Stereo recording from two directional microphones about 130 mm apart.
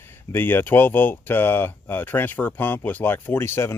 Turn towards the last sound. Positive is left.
turn(degrees=20)  # may be behind; listen again after turning